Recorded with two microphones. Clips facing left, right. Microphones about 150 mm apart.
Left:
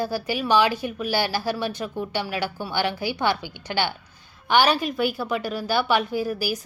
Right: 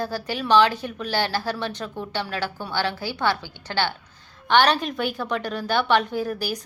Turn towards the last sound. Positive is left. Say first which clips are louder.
# left 1 dB
turn(degrees=5)  # may be behind; listen again after turning